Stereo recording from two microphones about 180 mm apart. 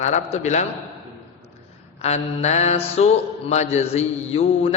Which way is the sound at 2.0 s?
40° left (ahead or behind).